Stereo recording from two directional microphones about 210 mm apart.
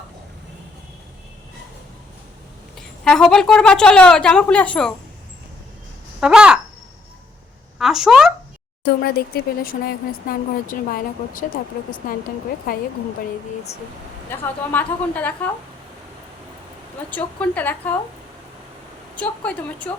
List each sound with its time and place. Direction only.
2.7 s a woman's voice: 5° left (ahead or behind)
6.1 s speech: 5° right (ahead or behind)
7.8 s speech: centre (ahead or behind)
9.0 s speech: 50° left (ahead or behind)
12.7 s speech: 45° left (ahead or behind)
14.3 s a woman's voice: 10° left (ahead or behind)
17.1 s a woman's voice: 5° left (ahead or behind)
19.1 s a woman's voice: 5° left (ahead or behind)